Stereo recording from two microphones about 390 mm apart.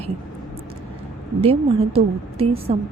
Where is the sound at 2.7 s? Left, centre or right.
Centre.